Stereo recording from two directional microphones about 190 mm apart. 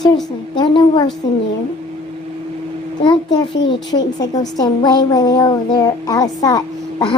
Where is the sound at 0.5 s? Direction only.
25° left (ahead or behind).